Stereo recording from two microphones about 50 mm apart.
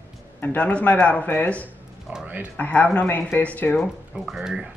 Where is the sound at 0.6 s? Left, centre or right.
Left.